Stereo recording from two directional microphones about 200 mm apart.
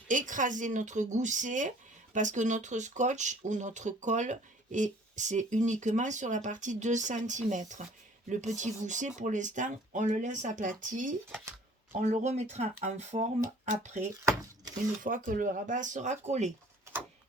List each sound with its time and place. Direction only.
0.1 s speech: 40° right (ahead or behind)